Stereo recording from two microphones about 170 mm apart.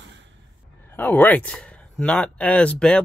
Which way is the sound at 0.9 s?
10° left (ahead or behind).